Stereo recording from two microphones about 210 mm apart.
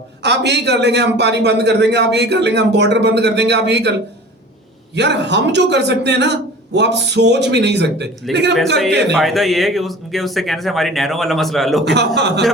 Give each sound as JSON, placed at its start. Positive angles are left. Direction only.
{"t": 0.2, "sound": "a man's voice", "side_deg": -55}
{"t": 4.9, "sound": "a man's voice", "side_deg": -55}
{"t": 9.1, "sound": "speech", "side_deg": 0}
{"t": 11.9, "sound": "a man's voice", "side_deg": -55}